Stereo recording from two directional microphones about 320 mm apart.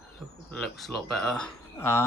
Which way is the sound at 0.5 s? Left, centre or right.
Centre.